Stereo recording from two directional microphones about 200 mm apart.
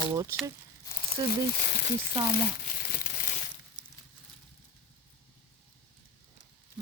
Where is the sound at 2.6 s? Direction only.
45° left (ahead or behind).